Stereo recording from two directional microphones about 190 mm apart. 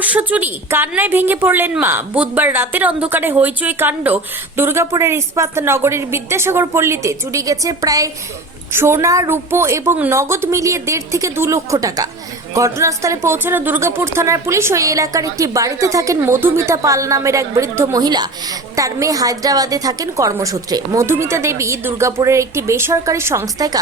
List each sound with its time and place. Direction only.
0.0 s a woman's voice: 10° right (ahead or behind)